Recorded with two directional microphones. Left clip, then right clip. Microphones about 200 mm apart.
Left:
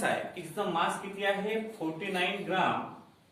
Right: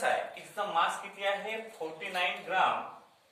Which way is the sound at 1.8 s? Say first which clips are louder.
Right 2 dB; 5° left (ahead or behind).